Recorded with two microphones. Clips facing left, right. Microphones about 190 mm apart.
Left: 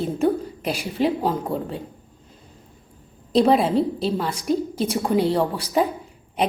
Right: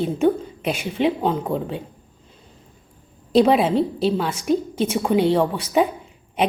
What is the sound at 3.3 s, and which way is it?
A woman's voice, centre (ahead or behind).